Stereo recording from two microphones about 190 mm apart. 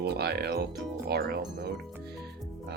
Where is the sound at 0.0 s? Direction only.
55° right (ahead or behind).